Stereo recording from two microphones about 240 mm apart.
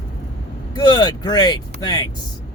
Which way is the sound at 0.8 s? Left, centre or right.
Centre.